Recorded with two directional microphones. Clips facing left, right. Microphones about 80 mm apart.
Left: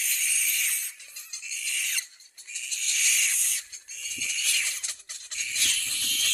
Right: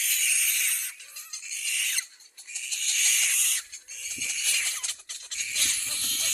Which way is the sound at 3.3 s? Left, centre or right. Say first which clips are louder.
Right 3 dB; right.